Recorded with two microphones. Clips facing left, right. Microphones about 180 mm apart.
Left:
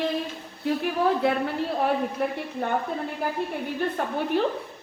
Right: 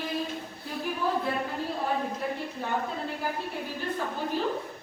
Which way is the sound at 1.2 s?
75° left (ahead or behind).